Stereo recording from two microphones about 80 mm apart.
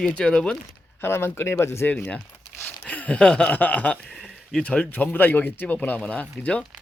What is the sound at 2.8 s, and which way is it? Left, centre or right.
Speech, centre.